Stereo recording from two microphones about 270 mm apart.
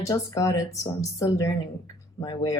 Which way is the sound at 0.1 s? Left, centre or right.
Centre.